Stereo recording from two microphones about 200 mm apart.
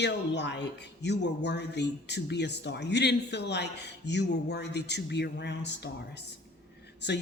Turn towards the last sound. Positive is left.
turn(degrees=60)  # may be behind; listen again after turning